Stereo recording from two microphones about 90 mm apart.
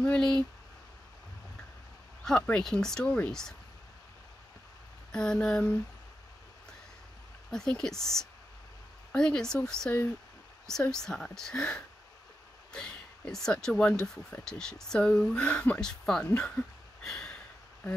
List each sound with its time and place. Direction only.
0.0 s speech: 10° left (ahead or behind)
2.5 s speech: 5° left (ahead or behind)
5.1 s speech: 10° left (ahead or behind)
7.5 s speech: 5° left (ahead or behind)
17.0 s a sound: 5° left (ahead or behind)